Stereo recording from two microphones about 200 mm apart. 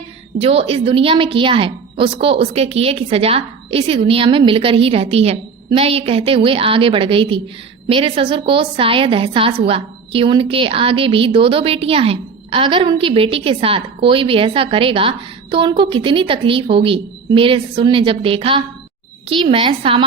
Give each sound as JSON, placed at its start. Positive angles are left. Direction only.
{"t": 0.3, "sound": "a woman's voice", "side_deg": -30}